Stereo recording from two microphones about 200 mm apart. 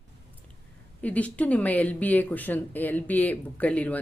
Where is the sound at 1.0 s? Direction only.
5° left (ahead or behind).